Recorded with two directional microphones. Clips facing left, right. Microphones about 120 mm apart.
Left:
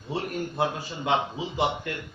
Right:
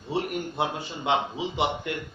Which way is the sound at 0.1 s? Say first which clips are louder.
Right 2 dB; 20° right (ahead or behind).